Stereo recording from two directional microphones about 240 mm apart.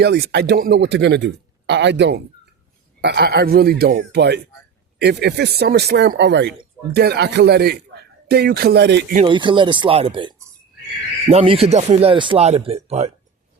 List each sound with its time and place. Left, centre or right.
0.0 s speech: right
9.1 s speech: right